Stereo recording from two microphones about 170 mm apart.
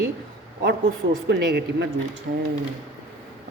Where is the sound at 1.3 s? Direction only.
90° right.